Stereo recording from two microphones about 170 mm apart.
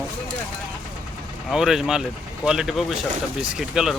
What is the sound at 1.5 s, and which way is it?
Speech, 5° right (ahead or behind).